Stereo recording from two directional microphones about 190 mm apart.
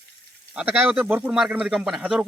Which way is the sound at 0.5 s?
10° right (ahead or behind).